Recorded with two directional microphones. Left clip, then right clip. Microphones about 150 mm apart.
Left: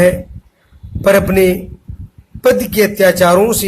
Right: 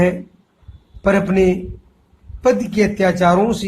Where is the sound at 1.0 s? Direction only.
40° left (ahead or behind).